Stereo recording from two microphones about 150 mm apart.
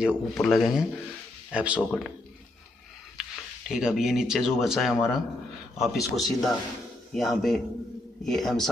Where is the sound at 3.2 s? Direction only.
5° right (ahead or behind).